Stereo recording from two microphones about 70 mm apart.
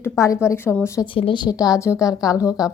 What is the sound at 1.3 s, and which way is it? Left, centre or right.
A woman's voice, left.